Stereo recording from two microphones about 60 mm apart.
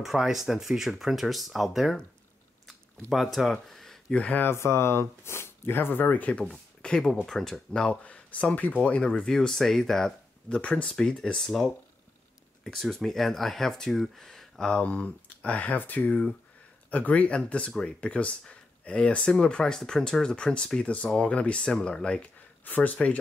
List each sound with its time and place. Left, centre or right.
0.0 s speech: centre
3.1 s speech: centre
3.6 s a sound: centre
4.1 s speech: left
4.4 s speech: left
6.4 s a sound: centre
7.2 s speech: centre
10.6 s speech: centre
12.8 s speech: centre
14.8 s speech: left
22.7 s speech: left